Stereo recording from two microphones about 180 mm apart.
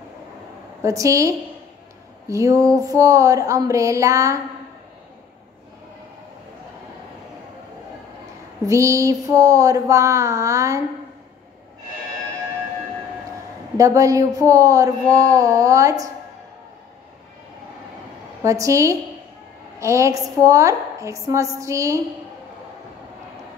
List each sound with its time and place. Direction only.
0.8 s a woman's voice: 15° right (ahead or behind)
8.6 s a woman's voice: 15° right (ahead or behind)
13.7 s speech: 20° right (ahead or behind)
18.4 s a woman's voice: 15° right (ahead or behind)